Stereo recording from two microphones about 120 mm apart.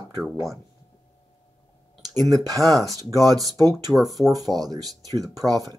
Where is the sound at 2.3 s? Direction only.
30° right (ahead or behind).